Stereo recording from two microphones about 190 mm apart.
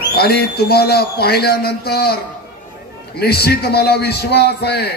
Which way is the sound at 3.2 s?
55° left (ahead or behind).